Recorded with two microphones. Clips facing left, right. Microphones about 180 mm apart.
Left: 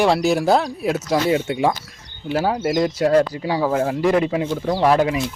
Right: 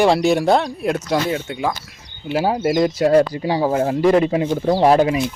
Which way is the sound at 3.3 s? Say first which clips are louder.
Right 2 dB; 30° right (ahead or behind).